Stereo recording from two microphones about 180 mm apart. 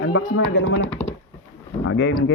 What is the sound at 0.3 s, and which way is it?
Speech, 65° left (ahead or behind).